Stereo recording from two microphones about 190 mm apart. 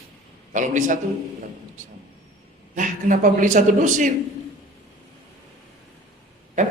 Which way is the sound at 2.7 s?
45° right (ahead or behind).